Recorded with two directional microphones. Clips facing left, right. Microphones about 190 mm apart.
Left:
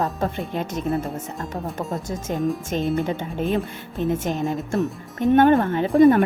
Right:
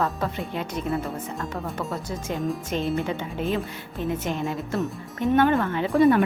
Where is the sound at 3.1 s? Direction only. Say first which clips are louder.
Left 3 dB; 50° left (ahead or behind).